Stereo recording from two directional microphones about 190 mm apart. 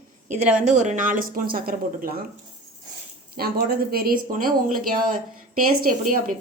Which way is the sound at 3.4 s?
55° right (ahead or behind).